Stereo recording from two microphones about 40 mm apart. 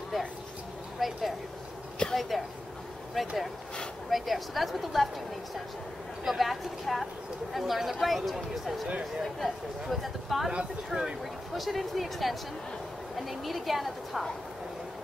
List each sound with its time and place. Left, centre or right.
0.9 s a sound: centre
3.2 s speech: centre
6.2 s speech: centre
10.9 s speech: right
11.5 s speech: centre